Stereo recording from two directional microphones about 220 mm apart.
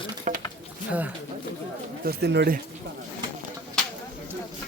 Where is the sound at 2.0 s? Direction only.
50° right (ahead or behind).